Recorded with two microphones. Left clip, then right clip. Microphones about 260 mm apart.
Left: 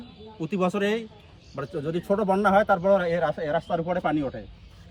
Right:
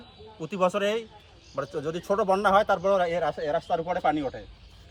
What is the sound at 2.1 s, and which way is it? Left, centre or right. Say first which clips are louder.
A man's voice: even; centre.